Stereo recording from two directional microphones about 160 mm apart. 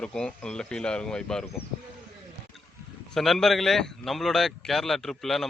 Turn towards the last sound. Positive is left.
turn(degrees=0)  # may be behind; listen again after turning